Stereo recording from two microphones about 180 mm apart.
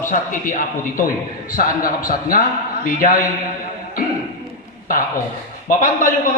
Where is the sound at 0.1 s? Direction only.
45° left (ahead or behind).